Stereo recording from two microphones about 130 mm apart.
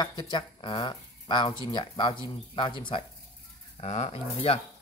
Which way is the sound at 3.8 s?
55° left (ahead or behind).